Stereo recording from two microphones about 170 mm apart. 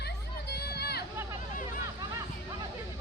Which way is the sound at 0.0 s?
75° left (ahead or behind).